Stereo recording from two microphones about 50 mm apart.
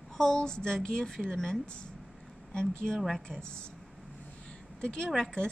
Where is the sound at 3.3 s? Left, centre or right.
Centre.